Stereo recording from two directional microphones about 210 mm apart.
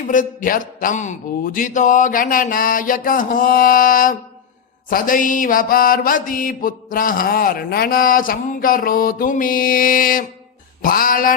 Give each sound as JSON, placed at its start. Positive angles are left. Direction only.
{"t": 0.1, "sound": "mantra", "side_deg": 40}